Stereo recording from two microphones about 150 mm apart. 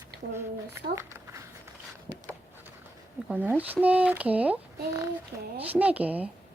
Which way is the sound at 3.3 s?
10° right (ahead or behind).